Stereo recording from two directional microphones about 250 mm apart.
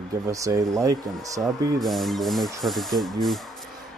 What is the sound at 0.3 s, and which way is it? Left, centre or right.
Speech, centre.